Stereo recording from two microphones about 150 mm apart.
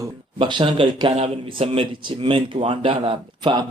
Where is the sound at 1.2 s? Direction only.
40° right (ahead or behind).